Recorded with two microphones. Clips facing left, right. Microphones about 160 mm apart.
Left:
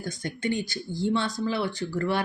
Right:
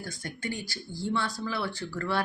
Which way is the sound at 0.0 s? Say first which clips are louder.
Left 6 dB; 20° left (ahead or behind).